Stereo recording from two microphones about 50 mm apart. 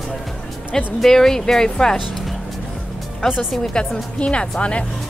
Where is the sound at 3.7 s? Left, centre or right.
Left.